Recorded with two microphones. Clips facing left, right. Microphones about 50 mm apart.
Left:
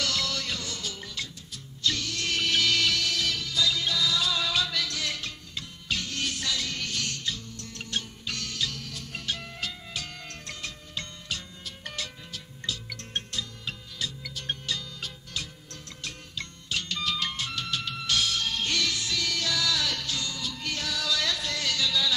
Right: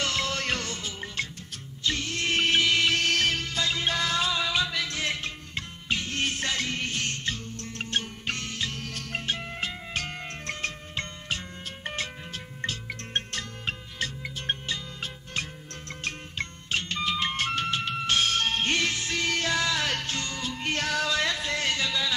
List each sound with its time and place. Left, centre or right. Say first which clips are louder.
0.0 s music: right 2 dB; right
0.7 s music: right 3 dB; right
3.0 s music: right 4 dB; right
4.3 s music: right 1 dB; right
8.8 s music: right 5 dB; right
9.2 s music: right 1 dB; right
14.2 s music: right 3 dB; right
17.4 s music: right 5 dB; right